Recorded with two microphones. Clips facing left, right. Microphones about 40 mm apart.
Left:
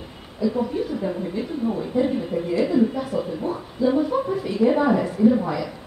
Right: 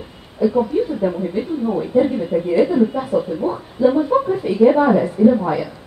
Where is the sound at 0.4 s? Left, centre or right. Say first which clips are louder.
Right 6 dB; right.